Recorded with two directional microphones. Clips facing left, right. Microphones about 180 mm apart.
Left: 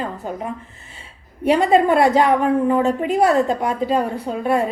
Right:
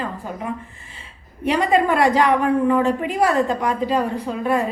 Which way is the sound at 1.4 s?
45° left (ahead or behind).